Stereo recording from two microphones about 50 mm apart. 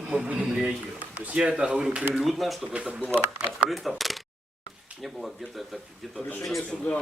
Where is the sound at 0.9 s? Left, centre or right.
Right.